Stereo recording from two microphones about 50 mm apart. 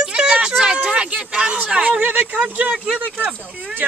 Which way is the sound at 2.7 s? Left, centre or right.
Centre.